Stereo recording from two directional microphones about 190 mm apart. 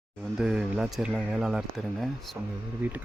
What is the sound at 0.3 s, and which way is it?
Speech, centre (ahead or behind).